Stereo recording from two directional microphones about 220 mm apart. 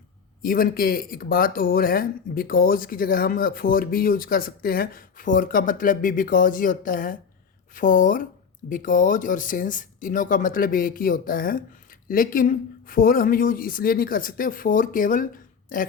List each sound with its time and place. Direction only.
0.4 s speech: 40° left (ahead or behind)